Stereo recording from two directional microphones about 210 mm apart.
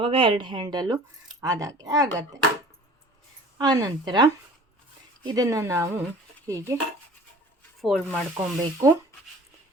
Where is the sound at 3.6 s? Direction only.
20° right (ahead or behind).